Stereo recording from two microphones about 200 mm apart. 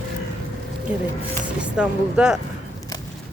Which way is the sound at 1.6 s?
5° right (ahead or behind).